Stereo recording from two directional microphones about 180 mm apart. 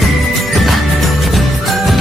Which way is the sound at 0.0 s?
Centre (ahead or behind).